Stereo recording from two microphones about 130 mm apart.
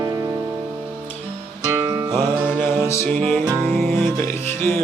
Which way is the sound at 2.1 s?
15° left (ahead or behind).